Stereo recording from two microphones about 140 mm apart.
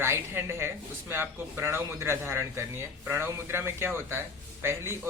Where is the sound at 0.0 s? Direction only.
20° right (ahead or behind).